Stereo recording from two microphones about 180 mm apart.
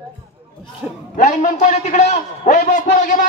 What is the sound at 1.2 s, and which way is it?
A man's voice, 40° left (ahead or behind).